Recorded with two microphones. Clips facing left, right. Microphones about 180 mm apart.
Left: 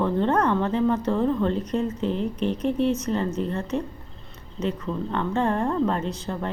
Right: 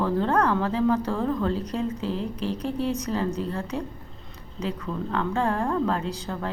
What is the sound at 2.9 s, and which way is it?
Speech, 15° right (ahead or behind).